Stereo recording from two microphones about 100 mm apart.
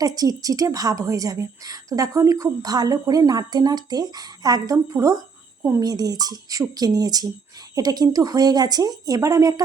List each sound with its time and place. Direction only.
0.0 s a woman's voice: 40° right (ahead or behind)